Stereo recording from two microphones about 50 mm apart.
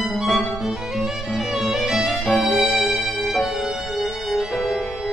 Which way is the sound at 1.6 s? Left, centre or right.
Centre.